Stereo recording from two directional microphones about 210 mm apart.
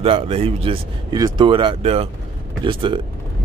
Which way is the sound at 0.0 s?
25° right (ahead or behind).